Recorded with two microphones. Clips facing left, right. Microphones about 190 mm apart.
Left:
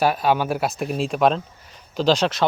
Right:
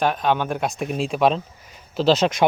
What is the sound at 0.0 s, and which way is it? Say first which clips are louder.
Speech: left 1 dB; 5° left (ahead or behind).